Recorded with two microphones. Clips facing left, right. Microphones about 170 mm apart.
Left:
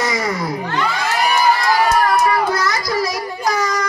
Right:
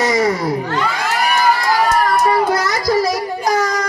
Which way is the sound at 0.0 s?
35° right (ahead or behind).